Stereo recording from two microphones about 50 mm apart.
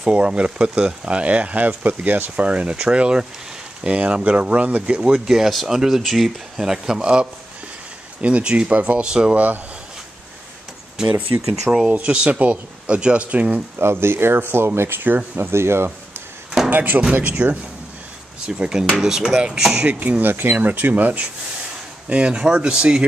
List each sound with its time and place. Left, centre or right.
0.0 s speech: right
5.2 s speech: centre
11.1 s speech: right
11.7 s speech: centre
13.7 s speech: right
15.3 s speech: right
16.7 s speech: right
18.4 s speech: centre
19.8 s speech: right
22.1 s speech: right